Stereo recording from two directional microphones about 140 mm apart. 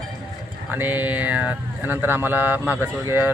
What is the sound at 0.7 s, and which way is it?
Speech, 15° right (ahead or behind).